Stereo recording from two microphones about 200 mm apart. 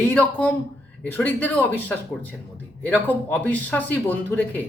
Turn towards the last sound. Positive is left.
turn(degrees=10)  # may be behind; listen again after turning